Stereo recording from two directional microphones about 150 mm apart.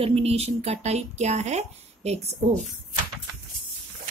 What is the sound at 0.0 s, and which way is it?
Speech, 40° right (ahead or behind).